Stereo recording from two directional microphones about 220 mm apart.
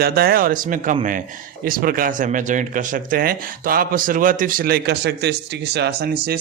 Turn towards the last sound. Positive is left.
turn(degrees=-45)  # may be behind; listen again after turning